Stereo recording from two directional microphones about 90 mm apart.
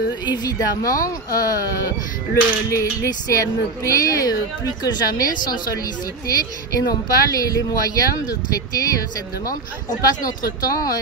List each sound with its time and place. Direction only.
0.2 s speech: 45° left (ahead or behind)
2.7 s speech: 35° left (ahead or behind)
10.0 s speech: 40° left (ahead or behind)